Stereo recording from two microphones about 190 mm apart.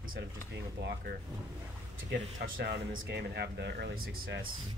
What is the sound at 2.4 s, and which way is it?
Speech, 55° right (ahead or behind).